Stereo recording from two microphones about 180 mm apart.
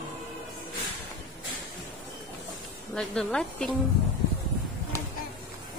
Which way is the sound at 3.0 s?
5° left (ahead or behind).